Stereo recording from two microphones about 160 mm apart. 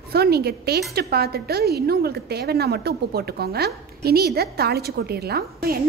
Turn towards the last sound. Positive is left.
turn(degrees=-70)  # may be behind; listen again after turning